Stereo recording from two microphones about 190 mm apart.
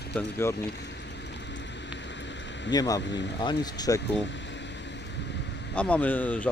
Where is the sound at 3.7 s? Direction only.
20° left (ahead or behind).